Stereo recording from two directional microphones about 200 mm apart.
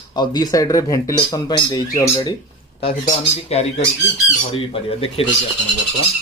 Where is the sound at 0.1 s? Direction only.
20° left (ahead or behind).